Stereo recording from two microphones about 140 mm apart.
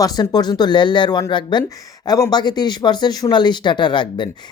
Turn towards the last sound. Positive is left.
turn(degrees=35)  # may be behind; listen again after turning